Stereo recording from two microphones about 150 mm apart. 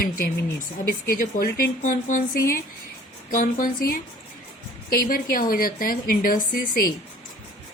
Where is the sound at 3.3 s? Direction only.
65° left (ahead or behind).